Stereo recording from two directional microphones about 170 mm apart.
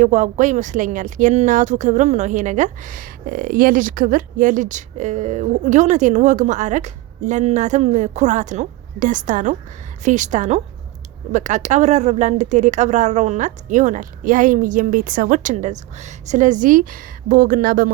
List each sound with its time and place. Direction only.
0.0 s a woman's voice: 45° right (ahead or behind)